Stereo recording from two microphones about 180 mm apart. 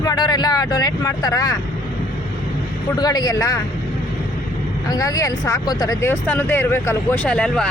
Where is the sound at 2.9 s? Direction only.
20° left (ahead or behind).